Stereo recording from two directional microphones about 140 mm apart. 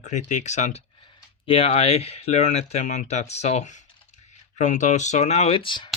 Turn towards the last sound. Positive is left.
turn(degrees=35)  # may be behind; listen again after turning